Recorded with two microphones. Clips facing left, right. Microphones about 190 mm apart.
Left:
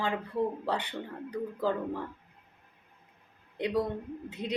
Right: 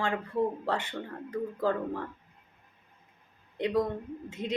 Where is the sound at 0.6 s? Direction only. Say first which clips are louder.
Right 1 dB; 15° left (ahead or behind).